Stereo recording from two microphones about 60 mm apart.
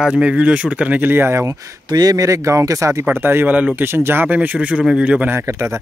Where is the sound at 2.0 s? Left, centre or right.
Right.